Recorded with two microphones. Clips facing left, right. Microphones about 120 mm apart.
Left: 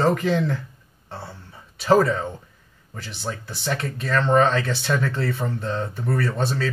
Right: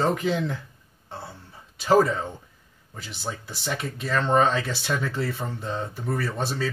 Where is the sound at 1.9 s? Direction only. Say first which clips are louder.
Left 2 dB; 15° right (ahead or behind).